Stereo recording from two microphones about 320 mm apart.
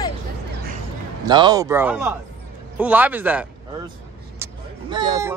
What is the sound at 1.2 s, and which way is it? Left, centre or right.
Speech, centre.